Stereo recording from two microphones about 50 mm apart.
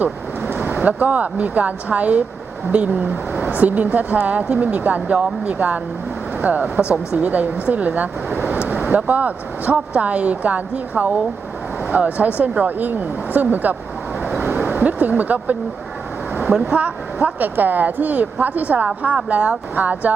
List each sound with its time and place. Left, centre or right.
0.0 s a sound: right
0.8 s speech: right
16.5 s speech: centre
16.7 s speech: right
19.1 s speech: right